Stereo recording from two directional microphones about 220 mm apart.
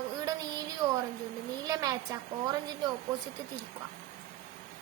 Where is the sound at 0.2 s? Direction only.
15° right (ahead or behind).